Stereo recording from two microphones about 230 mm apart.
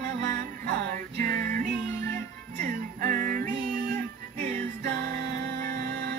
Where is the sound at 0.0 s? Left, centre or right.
Right.